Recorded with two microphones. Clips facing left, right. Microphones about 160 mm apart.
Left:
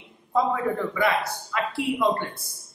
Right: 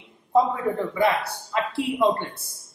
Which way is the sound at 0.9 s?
30° right (ahead or behind).